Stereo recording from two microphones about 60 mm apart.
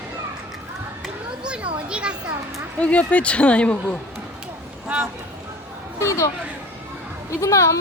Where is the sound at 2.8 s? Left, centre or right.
Left.